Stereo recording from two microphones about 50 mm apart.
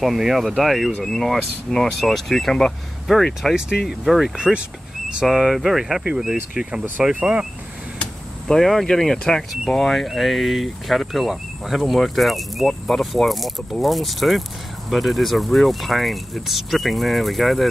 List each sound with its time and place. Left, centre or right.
0.0 s speech: centre
4.0 s speech: centre
6.0 s speech: centre
8.5 s speech: centre